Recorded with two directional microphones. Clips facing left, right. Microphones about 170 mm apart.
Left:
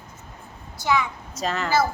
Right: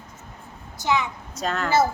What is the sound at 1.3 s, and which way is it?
Speech, centre (ahead or behind).